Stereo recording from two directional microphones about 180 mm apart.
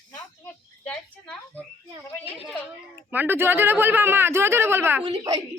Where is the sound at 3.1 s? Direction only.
10° right (ahead or behind).